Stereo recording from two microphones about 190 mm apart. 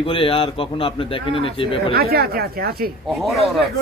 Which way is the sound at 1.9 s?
55° right (ahead or behind).